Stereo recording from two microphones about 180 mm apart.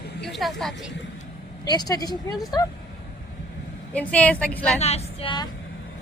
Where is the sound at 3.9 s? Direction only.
10° left (ahead or behind).